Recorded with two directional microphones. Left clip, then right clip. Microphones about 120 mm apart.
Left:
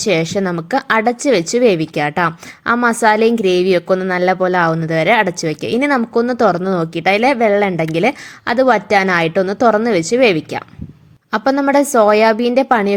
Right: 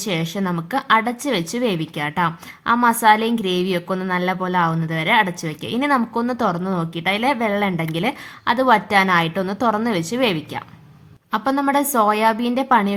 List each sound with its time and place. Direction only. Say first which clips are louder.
0.0 s a woman's voice: left 8 dB; 35° left (ahead or behind)